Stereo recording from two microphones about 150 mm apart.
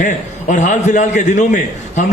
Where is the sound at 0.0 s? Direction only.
55° left (ahead or behind).